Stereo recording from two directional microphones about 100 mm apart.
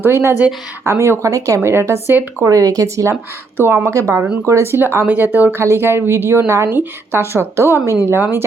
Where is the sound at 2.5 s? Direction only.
35° right (ahead or behind).